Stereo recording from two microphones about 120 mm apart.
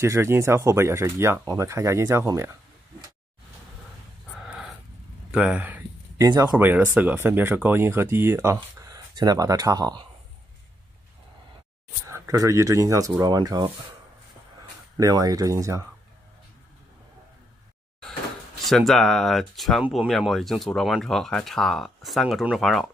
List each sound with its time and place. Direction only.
0.0 s speech: 25° right (ahead or behind)
4.4 s a sound: centre (ahead or behind)
5.3 s speech: 10° right (ahead or behind)
6.1 s speech: 30° right (ahead or behind)
6.5 s speech: 15° right (ahead or behind); by 10.0 s 35° right (ahead or behind)
12.1 s speech: 25° right (ahead or behind)
15.0 s speech: 30° right (ahead or behind)
18.6 s speech: centre (ahead or behind)